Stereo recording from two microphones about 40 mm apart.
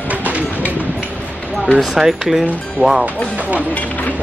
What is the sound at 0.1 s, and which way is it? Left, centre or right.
Music, right.